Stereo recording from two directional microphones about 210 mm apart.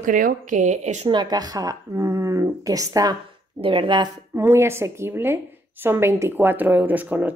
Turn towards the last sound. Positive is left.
turn(degrees=-10)  # may be behind; listen again after turning